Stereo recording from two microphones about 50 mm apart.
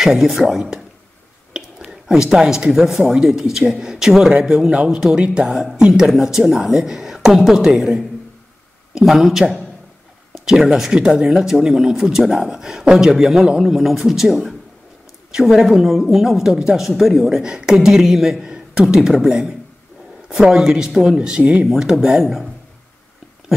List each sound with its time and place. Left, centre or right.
0.0 s a woman's voice: centre
1.5 s a sound: centre
2.7 s a woman's voice: centre; by 21.6 s right
22.0 s a woman's voice: centre